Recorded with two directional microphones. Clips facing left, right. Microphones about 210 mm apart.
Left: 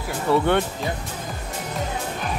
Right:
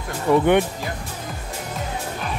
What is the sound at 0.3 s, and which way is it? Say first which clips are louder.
Speech: right 3 dB; 15° right (ahead or behind).